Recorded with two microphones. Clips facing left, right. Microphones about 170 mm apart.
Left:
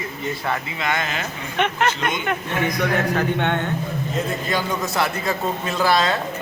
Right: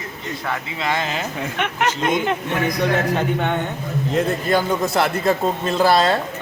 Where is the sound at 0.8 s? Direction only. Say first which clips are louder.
Right 5 dB; 30° right (ahead or behind).